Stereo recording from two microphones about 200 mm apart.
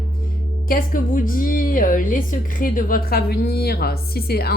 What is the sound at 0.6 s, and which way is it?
Speech, 45° left (ahead or behind).